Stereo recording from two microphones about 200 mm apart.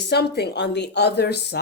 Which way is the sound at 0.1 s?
55° left (ahead or behind).